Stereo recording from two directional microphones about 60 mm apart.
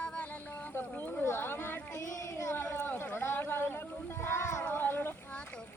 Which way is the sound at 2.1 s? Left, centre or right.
Left.